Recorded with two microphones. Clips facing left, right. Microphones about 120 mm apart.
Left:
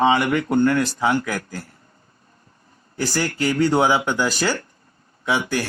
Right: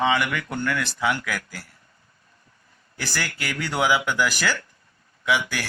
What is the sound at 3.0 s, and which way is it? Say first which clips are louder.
Speech: left 8 dB; 25° left (ahead or behind).